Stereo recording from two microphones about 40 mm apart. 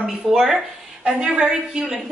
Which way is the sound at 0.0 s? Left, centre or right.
Centre.